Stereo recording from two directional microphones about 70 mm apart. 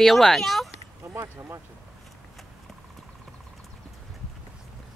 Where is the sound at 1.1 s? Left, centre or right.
Right.